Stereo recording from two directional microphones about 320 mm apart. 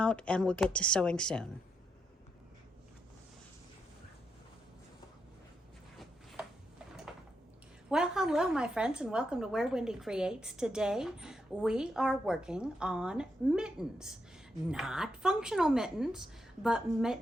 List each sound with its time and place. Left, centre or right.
0.0 s a woman's voice: centre
7.9 s a woman's voice: centre